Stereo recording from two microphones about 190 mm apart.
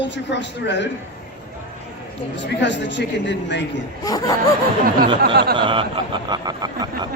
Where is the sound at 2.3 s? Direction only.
70° left (ahead or behind).